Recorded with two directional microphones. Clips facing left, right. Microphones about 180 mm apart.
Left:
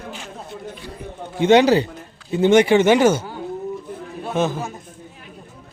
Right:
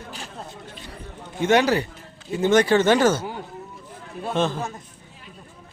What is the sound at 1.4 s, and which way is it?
A man's voice, 20° left (ahead or behind).